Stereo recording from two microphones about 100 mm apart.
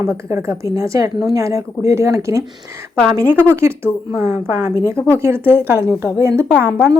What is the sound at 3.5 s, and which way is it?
Speech, 25° right (ahead or behind).